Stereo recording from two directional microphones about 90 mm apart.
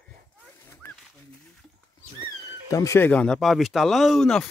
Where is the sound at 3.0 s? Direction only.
15° left (ahead or behind).